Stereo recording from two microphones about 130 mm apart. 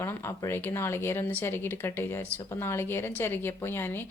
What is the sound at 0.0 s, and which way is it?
A woman's voice, 20° left (ahead or behind).